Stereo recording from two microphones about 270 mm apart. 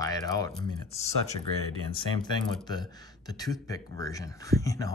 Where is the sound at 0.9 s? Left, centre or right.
Left.